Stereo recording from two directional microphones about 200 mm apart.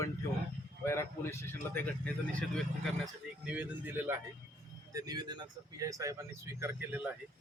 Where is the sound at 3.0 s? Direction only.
5° right (ahead or behind).